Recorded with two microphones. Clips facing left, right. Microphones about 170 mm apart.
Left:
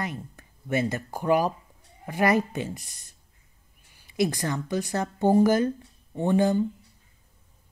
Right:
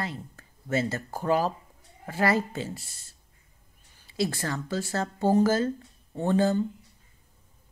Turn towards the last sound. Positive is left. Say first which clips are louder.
# left 2 dB
turn(degrees=15)  # may be behind; listen again after turning